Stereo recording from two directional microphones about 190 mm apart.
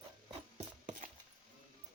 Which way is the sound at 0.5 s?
40° right (ahead or behind).